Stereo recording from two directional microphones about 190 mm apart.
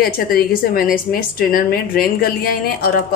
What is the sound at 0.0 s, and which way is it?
A woman's voice, 50° left (ahead or behind).